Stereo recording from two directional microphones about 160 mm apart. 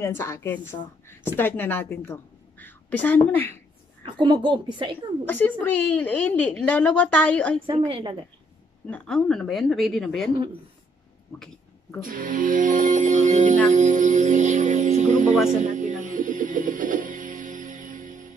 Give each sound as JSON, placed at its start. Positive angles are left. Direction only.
{"t": 0.0, "sound": "speech", "side_deg": 15}
{"t": 4.0, "sound": "a woman's voice", "side_deg": -30}
{"t": 5.2, "sound": "speech", "side_deg": 10}
{"t": 7.9, "sound": "a woman's voice", "side_deg": -30}
{"t": 8.9, "sound": "a woman's voice", "side_deg": 5}
{"t": 11.3, "sound": "a sound", "side_deg": 5}
{"t": 12.0, "sound": "speech", "side_deg": -60}
{"t": 13.7, "sound": "music", "side_deg": -50}